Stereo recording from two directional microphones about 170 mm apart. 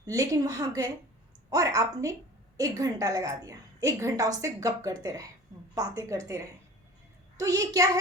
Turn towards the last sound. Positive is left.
turn(degrees=-20)  # may be behind; listen again after turning